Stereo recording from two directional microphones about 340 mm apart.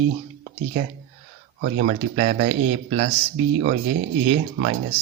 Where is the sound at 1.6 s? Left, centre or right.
Right.